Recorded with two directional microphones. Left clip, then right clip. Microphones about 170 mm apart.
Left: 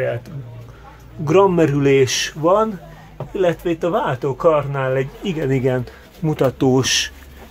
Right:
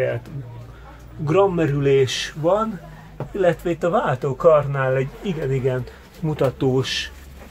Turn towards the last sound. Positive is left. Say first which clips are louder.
# left 5 dB
turn(degrees=35)  # may be behind; listen again after turning